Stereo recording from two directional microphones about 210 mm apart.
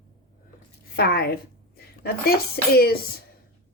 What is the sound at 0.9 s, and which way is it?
Speech, 50° left (ahead or behind).